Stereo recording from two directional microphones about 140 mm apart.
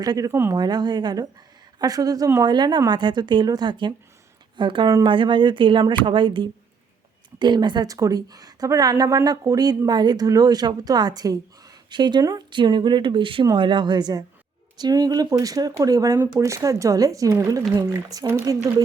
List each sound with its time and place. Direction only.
0.0 s a woman's voice: 25° right (ahead or behind)
0.5 s a woman's voice: 30° right (ahead or behind)